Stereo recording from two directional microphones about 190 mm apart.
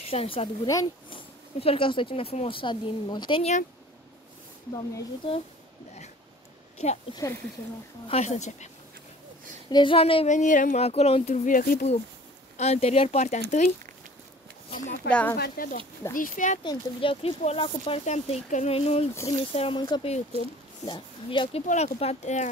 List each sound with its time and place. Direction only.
0.1 s speech: 30° left (ahead or behind)
0.7 s speech: 20° left (ahead or behind)
1.6 s a woman's voice: 30° left (ahead or behind)
4.7 s a woman's voice: 25° left (ahead or behind)
6.8 s speech: 35° left (ahead or behind)
9.7 s a woman's voice: 25° left (ahead or behind)
10.3 s speech: 45° left (ahead or behind)
12.5 s speech: 35° left (ahead or behind)
15.0 s speech: 5° left (ahead or behind)
15.3 s speech: 55° left (ahead or behind)
16.6 s speech: 30° left (ahead or behind)
20.3 s speech: 30° right (ahead or behind)
20.8 s a woman's voice: 25° left (ahead or behind)